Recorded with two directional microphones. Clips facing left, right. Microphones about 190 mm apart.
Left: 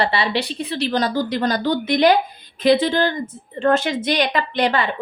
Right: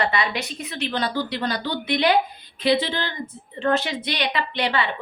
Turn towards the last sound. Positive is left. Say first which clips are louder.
# left 4 dB
turn(degrees=45)  # may be behind; listen again after turning